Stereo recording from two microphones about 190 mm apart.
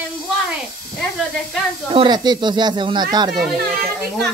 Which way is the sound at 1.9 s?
25° right (ahead or behind).